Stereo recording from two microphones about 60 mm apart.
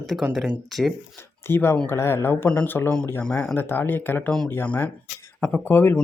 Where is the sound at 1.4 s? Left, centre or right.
Left.